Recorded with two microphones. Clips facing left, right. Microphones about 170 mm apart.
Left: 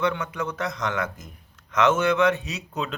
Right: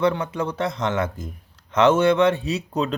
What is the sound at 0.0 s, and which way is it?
Speech, 30° right (ahead or behind).